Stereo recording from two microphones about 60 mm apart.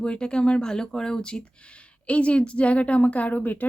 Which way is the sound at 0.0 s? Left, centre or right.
Centre.